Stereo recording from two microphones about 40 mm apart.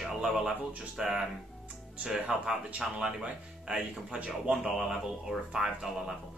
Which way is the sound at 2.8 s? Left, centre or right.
Centre.